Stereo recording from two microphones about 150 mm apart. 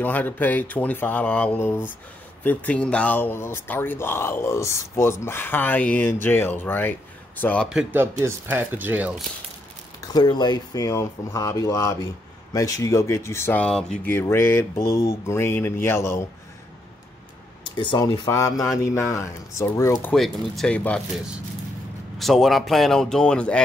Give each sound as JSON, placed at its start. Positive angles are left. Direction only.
{"t": 0.0, "sound": "speech", "side_deg": 10}
{"t": 7.7, "sound": "speech", "side_deg": -15}
{"t": 9.9, "sound": "speech", "side_deg": 25}
{"t": 17.7, "sound": "speech", "side_deg": 30}
{"t": 20.1, "sound": "speech", "side_deg": 5}
{"t": 22.2, "sound": "speech", "side_deg": 0}